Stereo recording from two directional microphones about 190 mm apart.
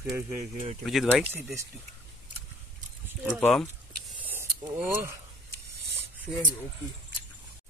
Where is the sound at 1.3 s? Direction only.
10° right (ahead or behind).